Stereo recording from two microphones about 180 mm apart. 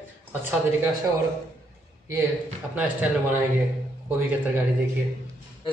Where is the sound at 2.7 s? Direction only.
10° right (ahead or behind).